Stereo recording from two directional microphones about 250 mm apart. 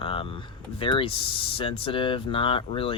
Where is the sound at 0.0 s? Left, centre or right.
Left.